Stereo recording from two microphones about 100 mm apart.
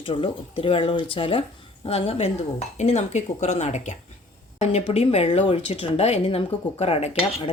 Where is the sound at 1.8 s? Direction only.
80° left.